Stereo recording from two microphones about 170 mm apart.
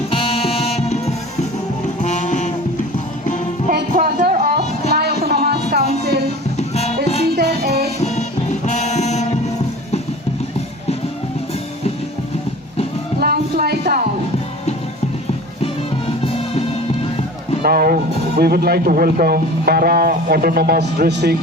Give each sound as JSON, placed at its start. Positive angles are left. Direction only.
{"t": 0.1, "sound": "music", "side_deg": 35}
{"t": 3.9, "sound": "a sound", "side_deg": -50}
{"t": 5.3, "sound": "music", "side_deg": -65}
{"t": 6.6, "sound": "music", "side_deg": 35}
{"t": 7.3, "sound": "music", "side_deg": -70}
{"t": 7.9, "sound": "music", "side_deg": 40}
{"t": 13.1, "sound": "a sound", "side_deg": -65}
{"t": 15.6, "sound": "music", "side_deg": 35}
{"t": 17.6, "sound": "speech", "side_deg": -60}